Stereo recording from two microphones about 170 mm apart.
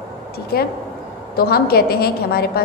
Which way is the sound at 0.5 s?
65° left (ahead or behind).